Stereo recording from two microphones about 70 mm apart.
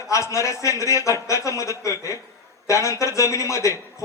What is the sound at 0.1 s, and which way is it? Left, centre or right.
A man's voice, left.